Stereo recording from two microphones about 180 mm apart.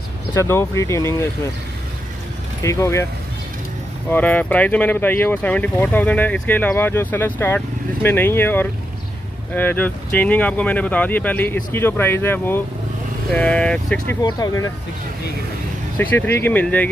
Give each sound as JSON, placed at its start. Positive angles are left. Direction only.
{"t": 0.3, "sound": "speech", "side_deg": 15}
{"t": 2.6, "sound": "speech", "side_deg": 15}
{"t": 4.1, "sound": "speech", "side_deg": 10}
{"t": 14.2, "sound": "speech", "side_deg": 20}
{"t": 16.0, "sound": "speech", "side_deg": 10}